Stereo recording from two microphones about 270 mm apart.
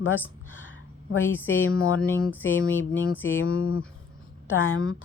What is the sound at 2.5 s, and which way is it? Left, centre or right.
A woman's voice, left.